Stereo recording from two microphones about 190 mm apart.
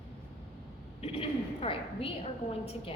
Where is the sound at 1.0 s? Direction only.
30° left (ahead or behind).